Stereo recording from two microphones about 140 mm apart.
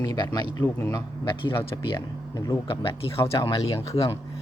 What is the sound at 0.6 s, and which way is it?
Speech, 20° left (ahead or behind).